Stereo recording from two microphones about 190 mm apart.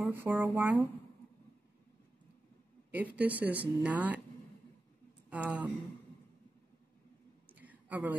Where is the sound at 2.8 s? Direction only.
10° right (ahead or behind).